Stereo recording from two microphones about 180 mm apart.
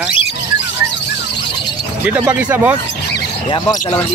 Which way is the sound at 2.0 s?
10° right (ahead or behind).